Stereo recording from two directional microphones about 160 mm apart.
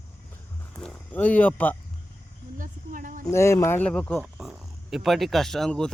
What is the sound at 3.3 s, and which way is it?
Speech, 15° left (ahead or behind).